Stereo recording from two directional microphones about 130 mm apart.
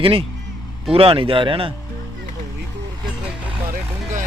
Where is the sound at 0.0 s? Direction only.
45° right (ahead or behind).